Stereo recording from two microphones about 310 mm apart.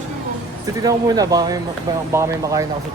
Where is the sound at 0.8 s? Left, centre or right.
Centre.